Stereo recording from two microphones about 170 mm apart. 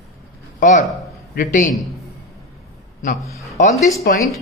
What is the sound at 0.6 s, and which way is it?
A man's voice, 50° left (ahead or behind).